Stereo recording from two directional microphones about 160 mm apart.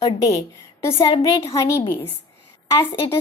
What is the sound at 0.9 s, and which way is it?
A woman's voice, 30° left (ahead or behind).